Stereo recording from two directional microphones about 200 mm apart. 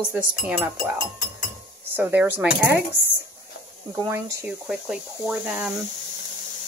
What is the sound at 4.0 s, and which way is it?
Speech, 15° right (ahead or behind).